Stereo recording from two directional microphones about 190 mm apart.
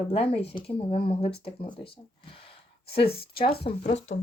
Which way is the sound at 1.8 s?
30° left (ahead or behind).